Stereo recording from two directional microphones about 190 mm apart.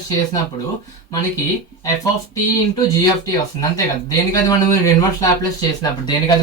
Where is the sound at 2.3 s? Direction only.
20° left (ahead or behind).